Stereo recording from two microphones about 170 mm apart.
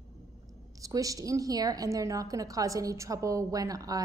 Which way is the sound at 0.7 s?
20° right (ahead or behind).